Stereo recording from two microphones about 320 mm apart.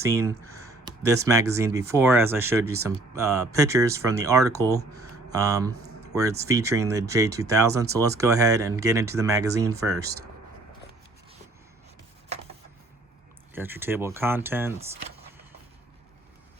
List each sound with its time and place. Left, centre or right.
0.0 s speech: centre
13.5 s speech: centre